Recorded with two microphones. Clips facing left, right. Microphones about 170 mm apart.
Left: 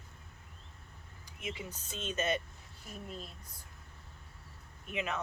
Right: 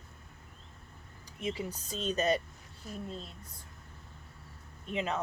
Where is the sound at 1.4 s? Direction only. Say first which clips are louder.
Right 6 dB; 35° right (ahead or behind).